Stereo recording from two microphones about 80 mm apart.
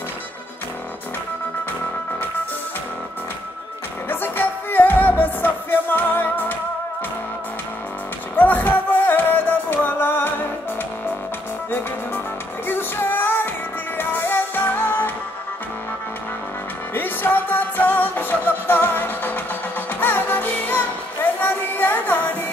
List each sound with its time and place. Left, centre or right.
4.1 s music: left
8.4 s music: left
12.6 s music: left
16.9 s music: left